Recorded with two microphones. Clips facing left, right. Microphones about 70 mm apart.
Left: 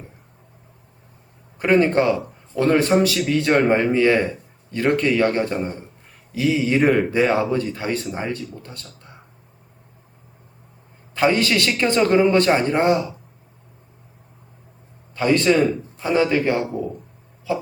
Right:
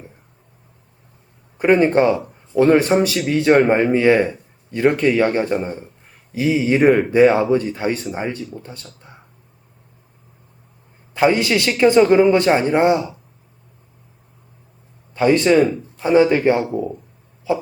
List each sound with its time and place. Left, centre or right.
1.5 s a man's voice: centre
3.6 s a man's voice: centre
3.9 s a man's voice: centre
4.2 s a sound: centre
5.0 s a man's voice: centre
11.1 s a man's voice: centre
15.1 s speech: centre
16.1 s a man's voice: centre